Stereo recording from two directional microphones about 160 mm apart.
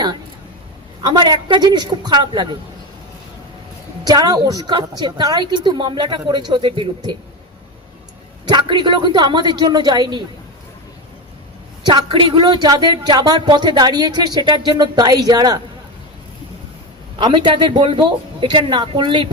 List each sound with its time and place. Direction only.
1.0 s speech: 30° right (ahead or behind)
4.0 s speech: 25° right (ahead or behind)
8.4 s speech: 30° right (ahead or behind)
11.9 s speech: 30° right (ahead or behind)
17.2 s speech: 30° right (ahead or behind)